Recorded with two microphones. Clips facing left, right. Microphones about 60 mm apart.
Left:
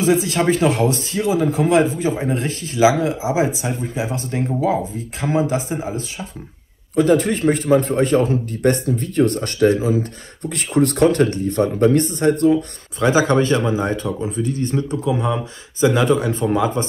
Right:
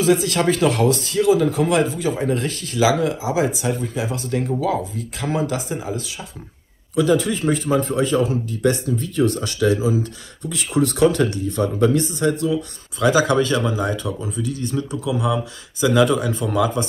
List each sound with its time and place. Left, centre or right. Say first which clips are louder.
0.0 s speech: left 1 dB; left
7.0 s a man's voice: left 3 dB; left
13.0 s speech: left 1 dB; left